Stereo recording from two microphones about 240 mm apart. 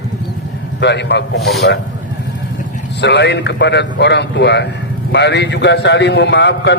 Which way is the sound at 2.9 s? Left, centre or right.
Left.